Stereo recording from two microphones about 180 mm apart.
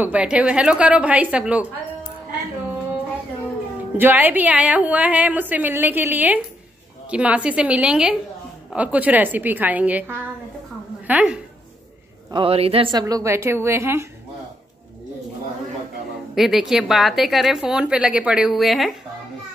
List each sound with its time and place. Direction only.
0.0 s a woman's voice: 5° right (ahead or behind)
3.9 s a woman's voice: 10° right (ahead or behind)
12.3 s speech: 30° right (ahead or behind)
13.0 s a woman's voice: 15° right (ahead or behind)
16.3 s a woman's voice: centre (ahead or behind)